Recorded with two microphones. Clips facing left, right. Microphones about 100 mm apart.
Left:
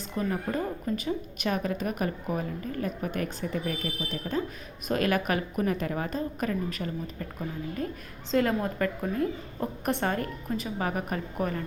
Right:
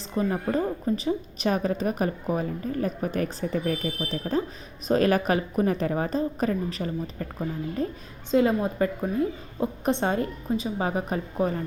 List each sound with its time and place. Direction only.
0.2 s a woman's voice: 25° right (ahead or behind)
8.3 s a woman's voice: 15° right (ahead or behind)